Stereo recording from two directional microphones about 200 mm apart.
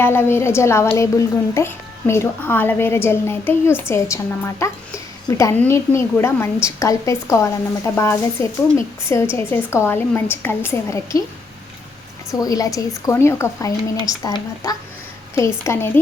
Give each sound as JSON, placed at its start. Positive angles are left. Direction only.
{"t": 0.0, "sound": "a woman's voice", "side_deg": 10}
{"t": 12.3, "sound": "a woman's voice", "side_deg": 15}